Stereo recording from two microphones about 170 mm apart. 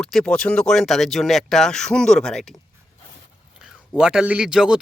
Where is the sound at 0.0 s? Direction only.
5° left (ahead or behind).